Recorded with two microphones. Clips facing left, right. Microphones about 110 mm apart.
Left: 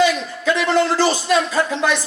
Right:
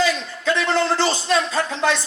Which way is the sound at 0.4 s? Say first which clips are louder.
Left 2 dB; 30° right (ahead or behind).